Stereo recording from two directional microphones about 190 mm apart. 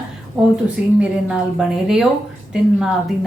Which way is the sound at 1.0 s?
5° right (ahead or behind).